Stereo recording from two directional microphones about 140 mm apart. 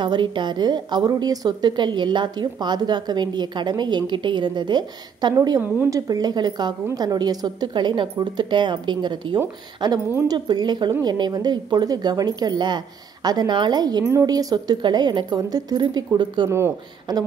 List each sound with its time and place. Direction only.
0.0 s a woman's voice: 35° right (ahead or behind)
16.4 s speech: 20° right (ahead or behind)